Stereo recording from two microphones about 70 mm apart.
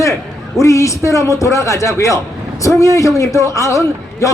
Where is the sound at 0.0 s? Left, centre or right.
Left.